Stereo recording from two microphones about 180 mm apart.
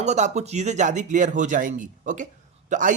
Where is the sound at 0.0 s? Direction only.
40° right (ahead or behind).